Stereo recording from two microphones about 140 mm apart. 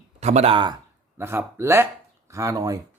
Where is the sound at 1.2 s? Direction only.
15° right (ahead or behind).